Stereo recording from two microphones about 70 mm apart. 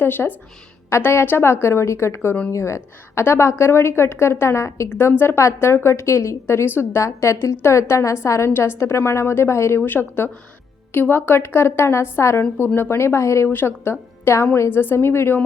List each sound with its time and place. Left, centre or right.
0.0 s a woman's voice: left